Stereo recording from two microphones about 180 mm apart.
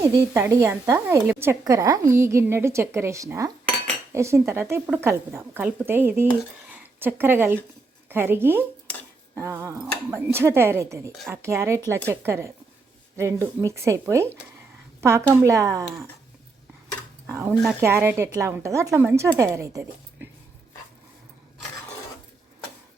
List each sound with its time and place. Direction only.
0.0 s a woman's voice: 15° right (ahead or behind)
17.2 s a woman's voice: 15° right (ahead or behind)